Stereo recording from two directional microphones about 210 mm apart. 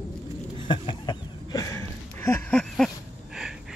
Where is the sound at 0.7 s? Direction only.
20° left (ahead or behind).